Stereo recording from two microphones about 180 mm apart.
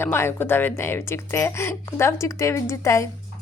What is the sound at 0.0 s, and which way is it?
Speech, 15° left (ahead or behind).